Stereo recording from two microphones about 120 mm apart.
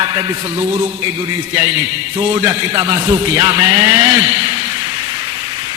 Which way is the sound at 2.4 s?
25° right (ahead or behind).